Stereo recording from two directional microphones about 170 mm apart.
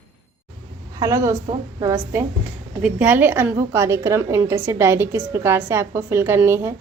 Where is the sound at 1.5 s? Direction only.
30° right (ahead or behind).